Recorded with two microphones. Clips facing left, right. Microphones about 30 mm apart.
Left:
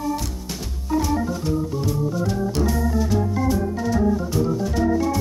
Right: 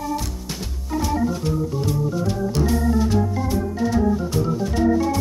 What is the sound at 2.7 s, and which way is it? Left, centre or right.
Organ, right.